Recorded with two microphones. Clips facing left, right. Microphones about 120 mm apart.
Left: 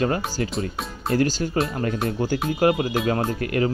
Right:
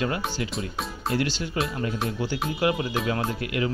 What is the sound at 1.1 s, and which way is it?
Speech, 40° left (ahead or behind).